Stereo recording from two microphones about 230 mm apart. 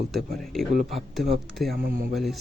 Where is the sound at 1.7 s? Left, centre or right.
Right.